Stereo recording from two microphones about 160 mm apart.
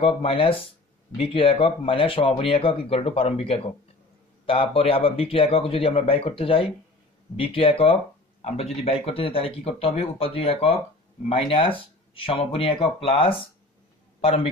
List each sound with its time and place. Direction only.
0.0 s speech: 35° left (ahead or behind)